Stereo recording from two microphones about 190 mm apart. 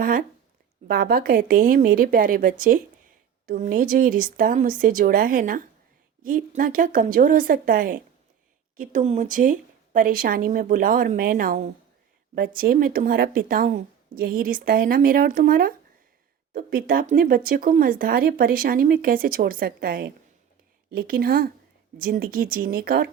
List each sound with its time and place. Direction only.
0.0 s a woman's voice: 45° right (ahead or behind)